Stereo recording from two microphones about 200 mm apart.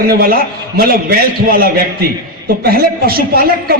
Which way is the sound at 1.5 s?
50° right (ahead or behind).